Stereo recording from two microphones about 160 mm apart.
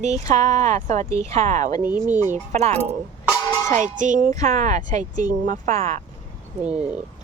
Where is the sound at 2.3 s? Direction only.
45° right (ahead or behind).